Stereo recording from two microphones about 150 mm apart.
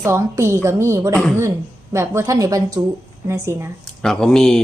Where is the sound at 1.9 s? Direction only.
20° right (ahead or behind).